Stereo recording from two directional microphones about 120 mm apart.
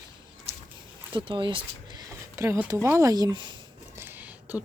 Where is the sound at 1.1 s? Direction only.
45° right (ahead or behind).